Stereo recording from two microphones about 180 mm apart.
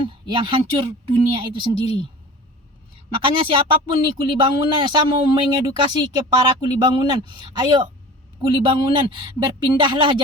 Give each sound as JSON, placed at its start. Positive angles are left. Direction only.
{"t": 0.0, "sound": "speech", "side_deg": -30}
{"t": 3.2, "sound": "speech", "side_deg": -30}